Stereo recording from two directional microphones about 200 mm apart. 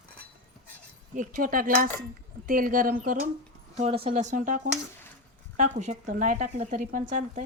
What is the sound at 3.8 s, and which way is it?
Speech, 30° right (ahead or behind).